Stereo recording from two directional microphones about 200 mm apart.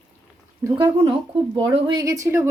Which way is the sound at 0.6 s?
25° right (ahead or behind).